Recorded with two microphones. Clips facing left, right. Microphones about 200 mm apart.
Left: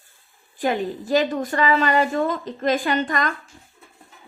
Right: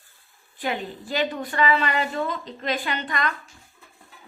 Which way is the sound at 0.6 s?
45° left (ahead or behind).